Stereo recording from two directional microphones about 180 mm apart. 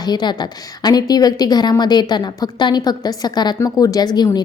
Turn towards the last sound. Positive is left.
turn(degrees=25)  # may be behind; listen again after turning